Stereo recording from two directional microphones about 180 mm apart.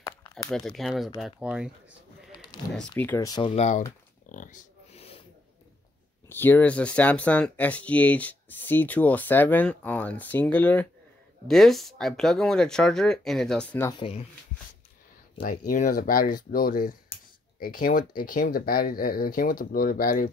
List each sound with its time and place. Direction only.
0.0 s crumpling: 20° left (ahead or behind)
0.5 s speech: centre (ahead or behind)
2.3 s a sound: 25° left (ahead or behind)
3.0 s speech: 15° left (ahead or behind)
3.5 s speech: 40° left (ahead or behind)
4.3 s a sound: 45° left (ahead or behind)
6.2 s speech: 10° left (ahead or behind)
13.9 s speech: 30° left (ahead or behind)
15.4 s speech: 45° left (ahead or behind)